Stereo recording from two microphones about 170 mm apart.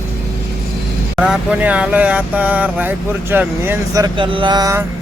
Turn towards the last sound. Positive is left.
turn(degrees=-20)  # may be behind; listen again after turning